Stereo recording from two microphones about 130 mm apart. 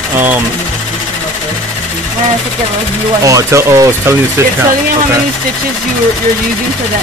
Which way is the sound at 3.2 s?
25° right (ahead or behind).